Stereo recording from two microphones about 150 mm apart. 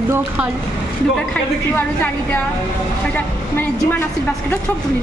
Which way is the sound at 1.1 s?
10° left (ahead or behind).